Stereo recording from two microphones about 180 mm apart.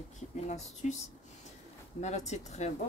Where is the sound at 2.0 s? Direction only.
40° left (ahead or behind).